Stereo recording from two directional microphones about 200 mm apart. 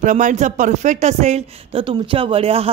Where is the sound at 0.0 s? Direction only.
40° right (ahead or behind).